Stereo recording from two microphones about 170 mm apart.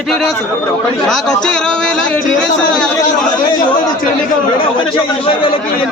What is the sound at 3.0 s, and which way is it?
A man's voice, 25° left (ahead or behind).